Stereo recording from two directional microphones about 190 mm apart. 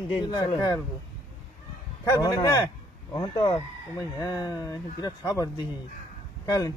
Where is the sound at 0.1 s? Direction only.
20° left (ahead or behind).